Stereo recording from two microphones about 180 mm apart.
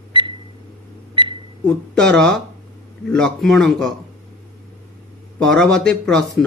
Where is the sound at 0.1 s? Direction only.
30° right (ahead or behind).